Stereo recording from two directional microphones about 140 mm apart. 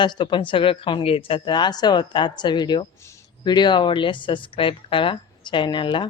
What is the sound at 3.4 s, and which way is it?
Speech, 30° left (ahead or behind).